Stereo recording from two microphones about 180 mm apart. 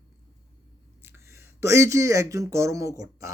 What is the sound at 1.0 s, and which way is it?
A man's voice, 15° right (ahead or behind).